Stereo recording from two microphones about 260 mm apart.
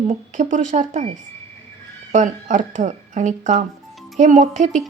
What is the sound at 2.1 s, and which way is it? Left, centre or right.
Speech, right.